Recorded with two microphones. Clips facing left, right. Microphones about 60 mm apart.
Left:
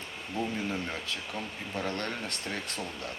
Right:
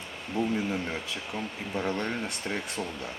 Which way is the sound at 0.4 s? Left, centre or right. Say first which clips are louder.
Right 4 dB; right.